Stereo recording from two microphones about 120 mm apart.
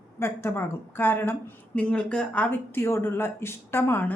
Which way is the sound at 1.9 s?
10° left (ahead or behind).